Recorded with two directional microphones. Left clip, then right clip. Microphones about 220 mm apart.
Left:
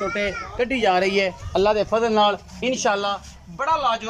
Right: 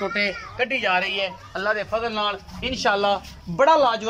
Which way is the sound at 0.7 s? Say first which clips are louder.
Left 3 dB; 25° left (ahead or behind).